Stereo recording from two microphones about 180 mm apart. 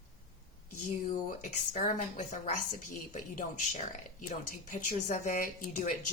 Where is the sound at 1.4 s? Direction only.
45° left (ahead or behind).